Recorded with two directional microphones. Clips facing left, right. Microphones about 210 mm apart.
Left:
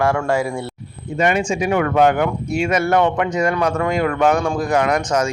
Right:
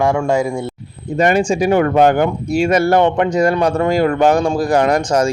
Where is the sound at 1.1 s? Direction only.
35° right (ahead or behind).